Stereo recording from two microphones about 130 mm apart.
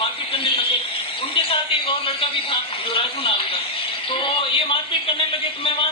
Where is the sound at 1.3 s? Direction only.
40° left (ahead or behind).